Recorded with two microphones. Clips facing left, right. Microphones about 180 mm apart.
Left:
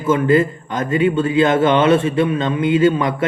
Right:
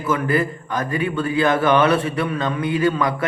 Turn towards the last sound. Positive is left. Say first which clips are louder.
# left 4 dB
turn(degrees=25)  # may be behind; listen again after turning